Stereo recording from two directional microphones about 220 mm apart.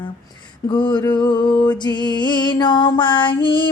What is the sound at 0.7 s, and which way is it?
Music, 20° left (ahead or behind).